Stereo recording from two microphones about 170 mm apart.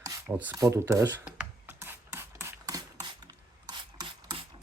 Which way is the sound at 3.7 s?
25° right (ahead or behind).